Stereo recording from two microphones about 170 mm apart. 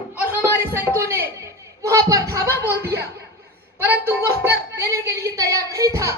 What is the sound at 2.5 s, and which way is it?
Music, 70° right (ahead or behind).